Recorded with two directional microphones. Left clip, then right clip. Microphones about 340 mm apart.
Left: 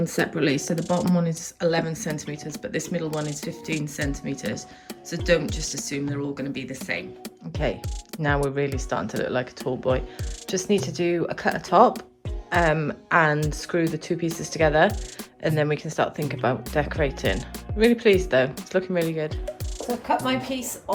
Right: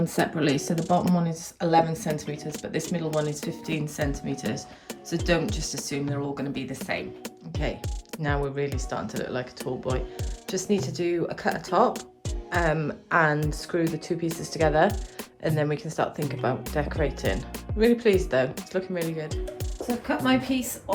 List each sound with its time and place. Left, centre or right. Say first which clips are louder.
0.2 s speech: left 1 dB; centre
5.9 s speech: even; centre
20.1 s speech: left 1 dB; centre